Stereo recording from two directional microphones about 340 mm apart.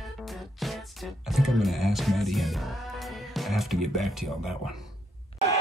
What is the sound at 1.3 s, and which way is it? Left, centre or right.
Speech, centre.